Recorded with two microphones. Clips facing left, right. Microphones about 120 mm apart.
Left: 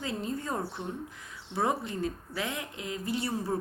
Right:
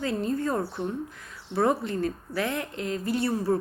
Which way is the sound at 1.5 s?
15° left (ahead or behind).